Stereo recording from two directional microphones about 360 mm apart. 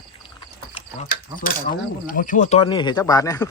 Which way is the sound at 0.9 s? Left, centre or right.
Left.